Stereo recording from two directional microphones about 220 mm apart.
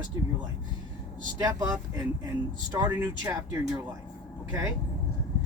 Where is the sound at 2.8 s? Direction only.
10° right (ahead or behind).